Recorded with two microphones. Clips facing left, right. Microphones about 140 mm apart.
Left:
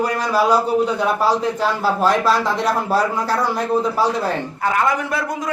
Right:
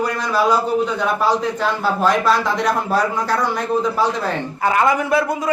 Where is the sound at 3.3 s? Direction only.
5° left (ahead or behind).